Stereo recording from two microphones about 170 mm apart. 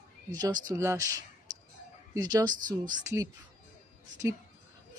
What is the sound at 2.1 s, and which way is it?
A woman's voice, 20° right (ahead or behind).